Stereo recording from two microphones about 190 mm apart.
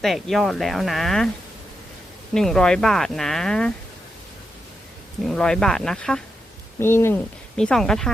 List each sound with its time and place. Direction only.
0.0 s speech: centre (ahead or behind)
2.3 s speech: 5° left (ahead or behind)
5.2 s speech: 5° left (ahead or behind)